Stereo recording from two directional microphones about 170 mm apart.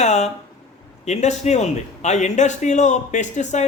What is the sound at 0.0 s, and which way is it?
A man's voice, 40° left (ahead or behind).